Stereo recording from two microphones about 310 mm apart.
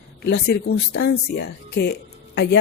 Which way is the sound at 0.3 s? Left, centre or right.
Left.